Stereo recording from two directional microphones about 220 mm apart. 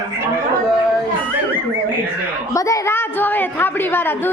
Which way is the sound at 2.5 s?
15° left (ahead or behind).